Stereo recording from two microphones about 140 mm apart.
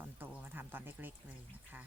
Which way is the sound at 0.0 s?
15° right (ahead or behind).